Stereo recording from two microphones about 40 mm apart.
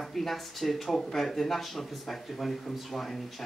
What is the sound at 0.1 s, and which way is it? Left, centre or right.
Speech, centre.